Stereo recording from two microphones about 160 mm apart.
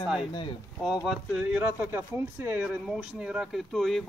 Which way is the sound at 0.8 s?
5° right (ahead or behind).